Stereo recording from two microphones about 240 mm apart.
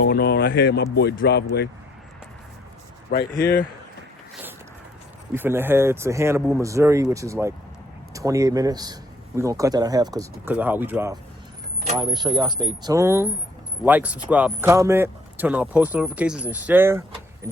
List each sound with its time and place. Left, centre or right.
0.0 s a sound: left
0.9 s a man's voice: left
3.1 s speech: left
5.3 s speech: centre